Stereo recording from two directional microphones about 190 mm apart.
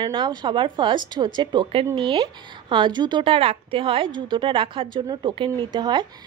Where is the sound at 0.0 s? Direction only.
25° right (ahead or behind).